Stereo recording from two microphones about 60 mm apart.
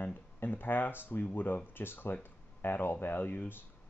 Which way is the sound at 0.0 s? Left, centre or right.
Left.